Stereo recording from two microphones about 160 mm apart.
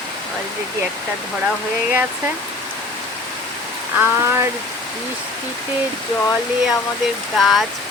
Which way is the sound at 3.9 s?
15° right (ahead or behind).